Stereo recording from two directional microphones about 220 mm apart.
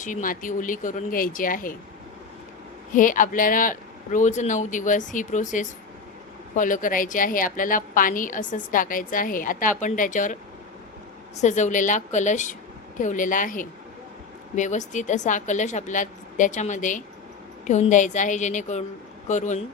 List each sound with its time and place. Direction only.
0.0 s a woman's voice: 35° left (ahead or behind)
2.9 s a woman's voice: 35° left (ahead or behind)
11.3 s a woman's voice: 35° left (ahead or behind)